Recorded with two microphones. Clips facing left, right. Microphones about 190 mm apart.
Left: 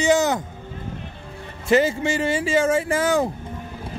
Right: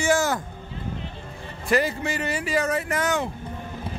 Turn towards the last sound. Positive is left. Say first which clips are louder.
# left 5 dB
turn(degrees=30)  # may be behind; listen again after turning